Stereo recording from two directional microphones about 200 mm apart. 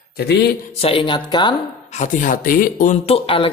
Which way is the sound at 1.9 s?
40° left (ahead or behind).